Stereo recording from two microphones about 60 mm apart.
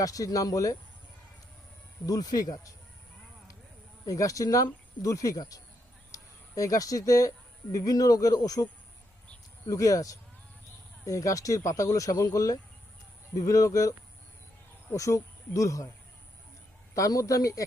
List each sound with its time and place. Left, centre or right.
0.0 s speech: left
2.0 s speech: left
4.0 s speech: left
9.6 s speech: left
11.0 s speech: left
14.9 s speech: left
16.9 s speech: left